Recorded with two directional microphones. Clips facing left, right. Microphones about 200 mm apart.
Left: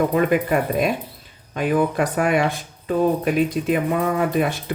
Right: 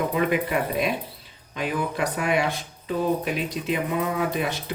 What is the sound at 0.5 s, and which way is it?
Speech, 45° left (ahead or behind).